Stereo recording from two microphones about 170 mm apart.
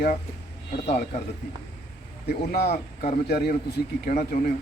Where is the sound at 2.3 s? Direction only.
70° left (ahead or behind); by 4.5 s 55° left (ahead or behind).